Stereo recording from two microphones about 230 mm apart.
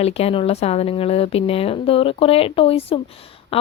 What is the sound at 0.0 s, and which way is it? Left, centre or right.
Speech, left.